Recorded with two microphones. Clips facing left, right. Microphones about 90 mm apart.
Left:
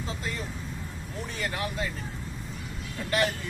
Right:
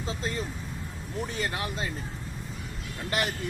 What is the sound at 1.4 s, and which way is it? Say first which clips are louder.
Speech: left 3 dB; 25° right (ahead or behind).